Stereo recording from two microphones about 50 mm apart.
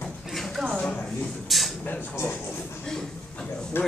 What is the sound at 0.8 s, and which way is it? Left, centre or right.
Speech, centre.